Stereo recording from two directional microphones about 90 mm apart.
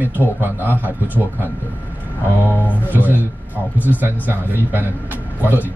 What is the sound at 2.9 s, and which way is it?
Speech, 20° right (ahead or behind).